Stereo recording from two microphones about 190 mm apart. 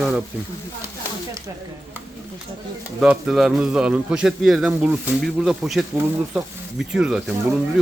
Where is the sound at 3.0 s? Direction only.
5° right (ahead or behind).